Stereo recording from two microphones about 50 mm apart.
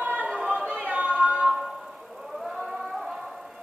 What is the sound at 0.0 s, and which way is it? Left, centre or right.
Chatter, right.